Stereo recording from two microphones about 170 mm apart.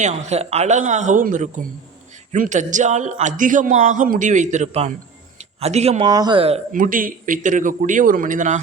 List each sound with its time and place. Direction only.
0.0 s a man's voice: 40° right (ahead or behind)
6.1 s speech: 25° right (ahead or behind)
6.7 s a man's voice: 50° right (ahead or behind)